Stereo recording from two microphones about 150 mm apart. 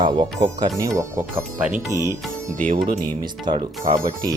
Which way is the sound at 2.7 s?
75° right (ahead or behind).